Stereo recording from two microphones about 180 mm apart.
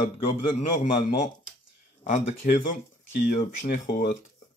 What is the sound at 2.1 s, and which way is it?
Speech, 45° left (ahead or behind).